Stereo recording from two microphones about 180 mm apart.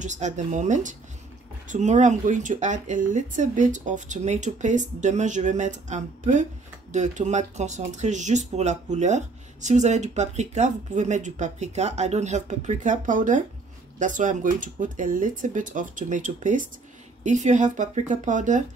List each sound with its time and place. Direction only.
0.0 s speech: 40° right (ahead or behind)